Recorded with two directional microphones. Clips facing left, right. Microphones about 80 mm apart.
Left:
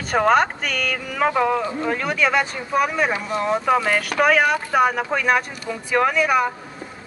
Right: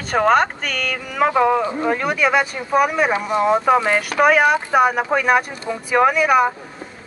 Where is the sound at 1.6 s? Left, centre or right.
Right.